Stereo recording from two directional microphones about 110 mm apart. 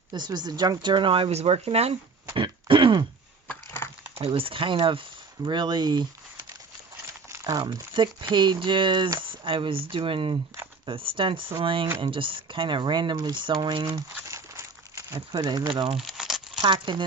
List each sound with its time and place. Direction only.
0.1 s speech: 40° right (ahead or behind); by 2.0 s 70° right (ahead or behind)
2.3 s throat clearing: 50° right (ahead or behind)
4.3 s speech: 55° right (ahead or behind)
7.3 s crumpling: 25° right (ahead or behind)
7.5 s speech: 35° right (ahead or behind)
7.9 s speech: 45° right (ahead or behind)
14.2 s a sound: 30° right (ahead or behind)
15.3 s speech: 40° right (ahead or behind)
16.0 s crumpling: 5° right (ahead or behind)
16.6 s speech: 45° right (ahead or behind)